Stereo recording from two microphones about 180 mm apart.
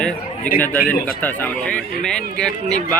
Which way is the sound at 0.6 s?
10° left (ahead or behind).